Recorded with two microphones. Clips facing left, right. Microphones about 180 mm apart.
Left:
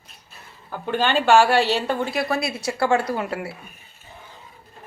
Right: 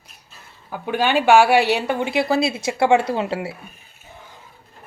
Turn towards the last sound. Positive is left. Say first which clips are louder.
# right 3 dB
turn(degrees=-25)  # may be behind; listen again after turning